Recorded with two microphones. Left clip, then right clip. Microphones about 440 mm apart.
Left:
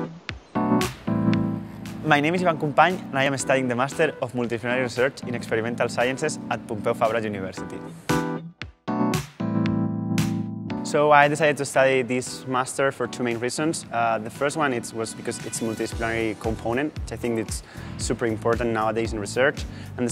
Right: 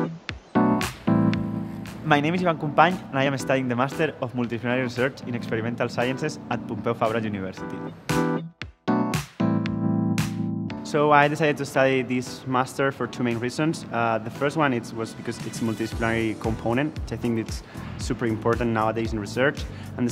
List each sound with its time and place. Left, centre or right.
0.0 s music: centre
2.0 s speech: left
8.1 s music: centre
10.8 s speech: left